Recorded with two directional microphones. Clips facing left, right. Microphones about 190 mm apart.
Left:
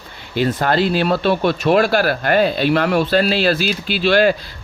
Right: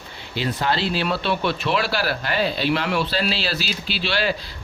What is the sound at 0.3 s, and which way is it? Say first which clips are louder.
Speech: left 7 dB; 50° left (ahead or behind).